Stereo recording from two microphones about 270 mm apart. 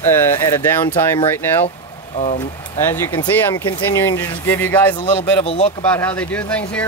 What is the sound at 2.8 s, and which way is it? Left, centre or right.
Speech, centre.